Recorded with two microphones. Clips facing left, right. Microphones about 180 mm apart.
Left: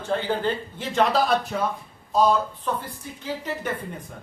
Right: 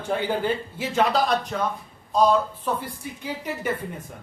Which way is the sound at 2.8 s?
10° right (ahead or behind).